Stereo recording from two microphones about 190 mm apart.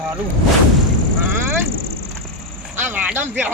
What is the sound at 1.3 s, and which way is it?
Vehicle, 10° right (ahead or behind).